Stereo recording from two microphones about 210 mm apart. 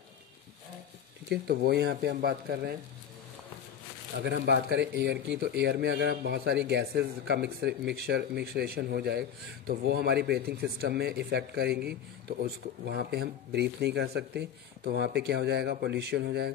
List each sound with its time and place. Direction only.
1.3 s a man's voice: 50° right (ahead or behind)
4.2 s a man's voice: 50° right (ahead or behind)